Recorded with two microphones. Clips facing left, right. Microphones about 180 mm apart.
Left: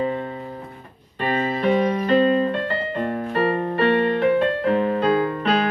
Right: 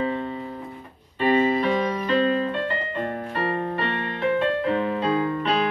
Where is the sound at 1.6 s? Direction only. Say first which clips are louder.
Left 4 dB; 45° left (ahead or behind).